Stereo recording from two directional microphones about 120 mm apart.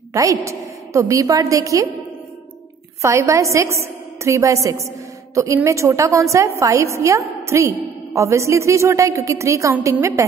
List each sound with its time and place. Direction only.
0.1 s a woman's voice: 25° right (ahead or behind)
3.0 s a woman's voice: 25° right (ahead or behind)